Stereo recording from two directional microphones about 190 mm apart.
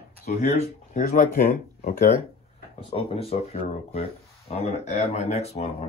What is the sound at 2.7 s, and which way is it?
Speech, 30° left (ahead or behind).